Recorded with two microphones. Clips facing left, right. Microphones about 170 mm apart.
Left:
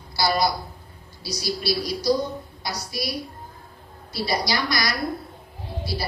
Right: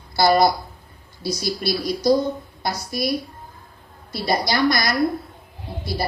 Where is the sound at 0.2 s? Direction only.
50° right (ahead or behind).